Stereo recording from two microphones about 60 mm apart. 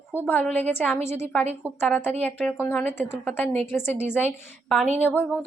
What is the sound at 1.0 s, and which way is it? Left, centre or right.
Speech, left.